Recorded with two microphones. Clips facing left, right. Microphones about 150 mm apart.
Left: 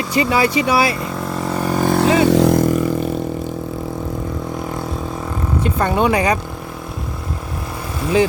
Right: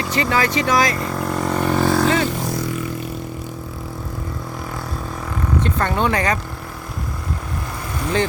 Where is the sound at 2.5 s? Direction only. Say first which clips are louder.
Left 10 dB; 50° left (ahead or behind).